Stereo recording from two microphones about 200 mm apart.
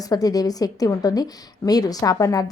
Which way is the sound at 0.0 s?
20° left (ahead or behind).